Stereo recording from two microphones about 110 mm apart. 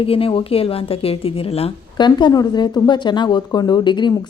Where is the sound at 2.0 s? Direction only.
45° left (ahead or behind).